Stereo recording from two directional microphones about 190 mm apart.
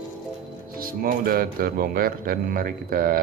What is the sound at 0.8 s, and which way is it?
Speech, 50° right (ahead or behind).